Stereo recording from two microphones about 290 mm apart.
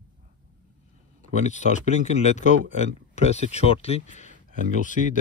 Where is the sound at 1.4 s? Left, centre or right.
Left.